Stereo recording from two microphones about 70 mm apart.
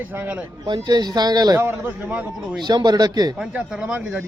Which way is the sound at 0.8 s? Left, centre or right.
Right.